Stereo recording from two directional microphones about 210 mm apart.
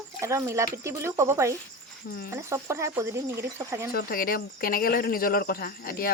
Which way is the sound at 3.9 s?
45° left (ahead or behind).